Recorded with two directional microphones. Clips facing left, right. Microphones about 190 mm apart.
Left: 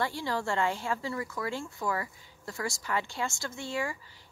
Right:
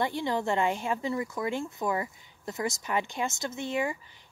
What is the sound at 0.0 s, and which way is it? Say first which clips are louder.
Speech: right 3 dB; 20° right (ahead or behind).